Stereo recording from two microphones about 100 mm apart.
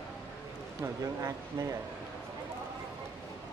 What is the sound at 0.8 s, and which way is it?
Speech, 35° right (ahead or behind).